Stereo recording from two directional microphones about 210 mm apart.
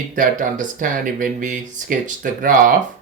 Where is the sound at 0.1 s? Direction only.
35° right (ahead or behind).